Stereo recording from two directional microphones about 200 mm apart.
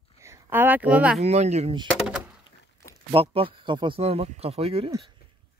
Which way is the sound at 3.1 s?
25° right (ahead or behind).